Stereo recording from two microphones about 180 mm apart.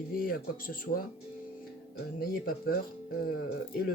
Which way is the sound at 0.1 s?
55° left (ahead or behind).